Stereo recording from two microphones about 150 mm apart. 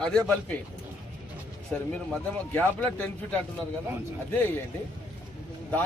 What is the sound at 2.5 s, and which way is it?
Speech, 10° left (ahead or behind).